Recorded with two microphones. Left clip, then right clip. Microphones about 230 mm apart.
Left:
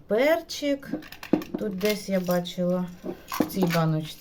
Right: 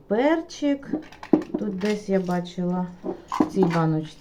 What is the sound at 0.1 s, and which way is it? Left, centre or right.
Speech, left.